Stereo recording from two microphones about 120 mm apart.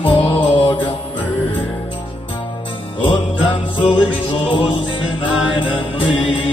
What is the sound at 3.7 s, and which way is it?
Music, 40° left (ahead or behind).